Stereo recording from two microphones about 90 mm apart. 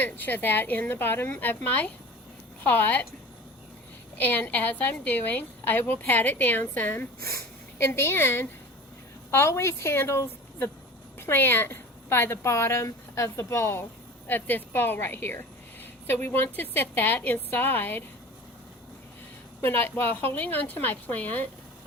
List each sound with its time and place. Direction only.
0.0 s a woman's voice: 20° left (ahead or behind)
4.2 s a woman's voice: 20° left (ahead or behind)
19.6 s a woman's voice: 25° left (ahead or behind)